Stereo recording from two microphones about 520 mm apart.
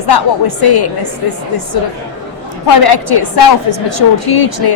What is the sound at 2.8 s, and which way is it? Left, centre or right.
A woman's voice, left.